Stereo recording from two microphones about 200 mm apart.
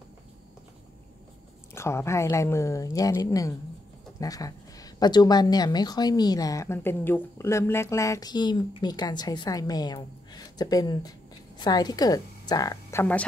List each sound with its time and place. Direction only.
1.8 s a woman's voice: 15° left (ahead or behind)